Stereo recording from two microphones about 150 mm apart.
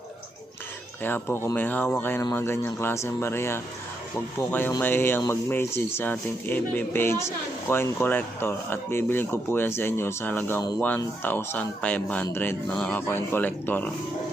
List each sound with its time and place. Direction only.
1.0 s speech: 15° left (ahead or behind)